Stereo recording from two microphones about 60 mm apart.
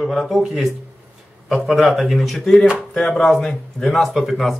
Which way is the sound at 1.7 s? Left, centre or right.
Centre.